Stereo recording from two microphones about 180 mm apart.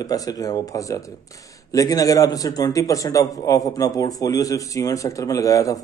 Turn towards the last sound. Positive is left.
turn(degrees=20)  # may be behind; listen again after turning